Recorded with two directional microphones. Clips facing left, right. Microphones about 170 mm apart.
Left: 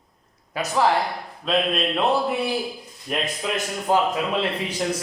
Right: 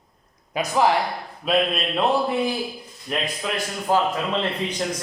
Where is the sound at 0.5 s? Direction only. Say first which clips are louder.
Right 1 dB; 15° right (ahead or behind).